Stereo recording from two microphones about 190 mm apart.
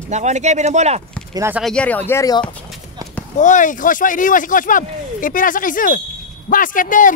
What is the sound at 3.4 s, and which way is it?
Speech, 40° left (ahead or behind).